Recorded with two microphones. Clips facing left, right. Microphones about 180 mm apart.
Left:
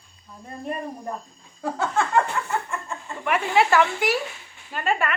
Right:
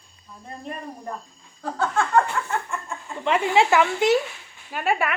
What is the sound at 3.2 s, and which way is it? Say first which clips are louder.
Speech: right 1 dB; 25° right (ahead or behind).